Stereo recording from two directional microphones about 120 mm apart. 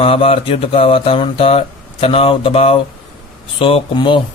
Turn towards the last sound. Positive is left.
turn(degrees=45)  # may be behind; listen again after turning